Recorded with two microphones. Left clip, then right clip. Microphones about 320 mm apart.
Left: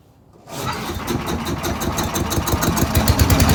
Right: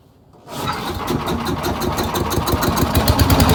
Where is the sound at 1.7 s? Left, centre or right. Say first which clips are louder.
Right 2 dB; centre.